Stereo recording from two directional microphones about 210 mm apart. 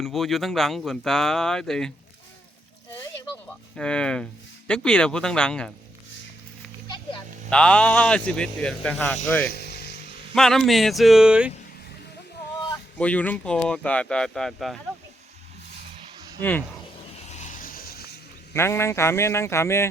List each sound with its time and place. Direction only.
0.0 s speech: centre (ahead or behind)
3.8 s speech: 5° left (ahead or behind)
7.5 s speech: 5° left (ahead or behind)
9.5 s a sound: 50° left (ahead or behind)
10.3 s speech: centre (ahead or behind)
13.0 s speech: 5° left (ahead or behind)
16.4 s speech: 10° left (ahead or behind)
17.2 s a sound: 35° left (ahead or behind)
18.5 s speech: 10° left (ahead or behind)